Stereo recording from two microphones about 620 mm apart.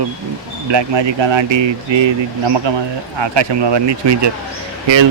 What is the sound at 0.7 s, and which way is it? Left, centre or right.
Speech, right.